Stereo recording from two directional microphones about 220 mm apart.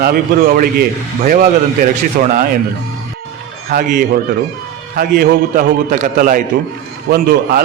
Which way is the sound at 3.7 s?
35° right (ahead or behind).